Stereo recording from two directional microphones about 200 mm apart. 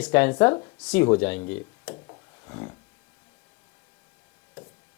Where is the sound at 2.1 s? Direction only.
20° left (ahead or behind).